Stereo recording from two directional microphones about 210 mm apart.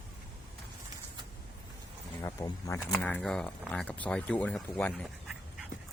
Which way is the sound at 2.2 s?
15° left (ahead or behind).